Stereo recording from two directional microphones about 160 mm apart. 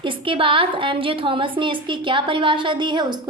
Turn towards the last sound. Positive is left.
turn(degrees=-30)  # may be behind; listen again after turning